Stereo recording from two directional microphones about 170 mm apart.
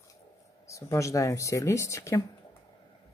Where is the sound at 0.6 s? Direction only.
20° left (ahead or behind).